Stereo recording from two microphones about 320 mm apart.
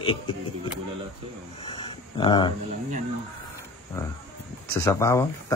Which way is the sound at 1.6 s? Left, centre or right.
Centre.